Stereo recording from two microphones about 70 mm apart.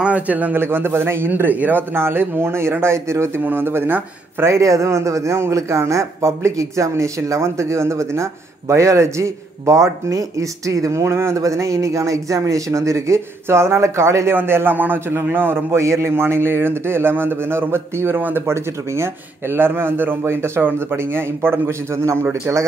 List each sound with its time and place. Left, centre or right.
0.0 s speech: right
4.6 s a man's voice: right
18.4 s speech: right